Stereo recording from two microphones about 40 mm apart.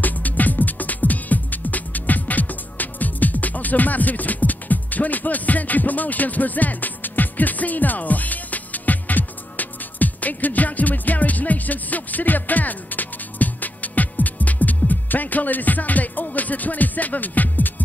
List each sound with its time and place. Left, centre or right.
0.0 s music: left